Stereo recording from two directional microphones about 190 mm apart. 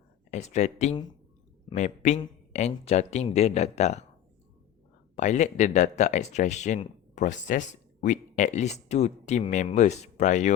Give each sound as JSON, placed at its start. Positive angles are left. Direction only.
{"t": 0.3, "sound": "speech", "side_deg": 35}
{"t": 5.1, "sound": "speech", "side_deg": 40}